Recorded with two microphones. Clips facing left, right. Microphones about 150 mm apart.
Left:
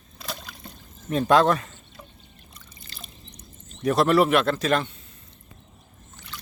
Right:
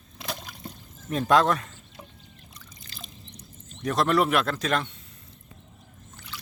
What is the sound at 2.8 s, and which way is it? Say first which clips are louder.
Drip: even; 5° left (ahead or behind).